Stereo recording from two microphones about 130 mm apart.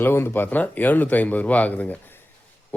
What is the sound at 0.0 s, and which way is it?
Speech, 15° left (ahead or behind).